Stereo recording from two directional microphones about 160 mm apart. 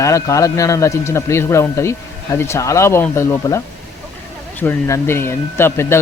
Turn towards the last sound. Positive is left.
turn(degrees=15)  # may be behind; listen again after turning